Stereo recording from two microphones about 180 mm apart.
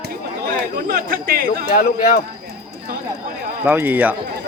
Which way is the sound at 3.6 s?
10° right (ahead or behind).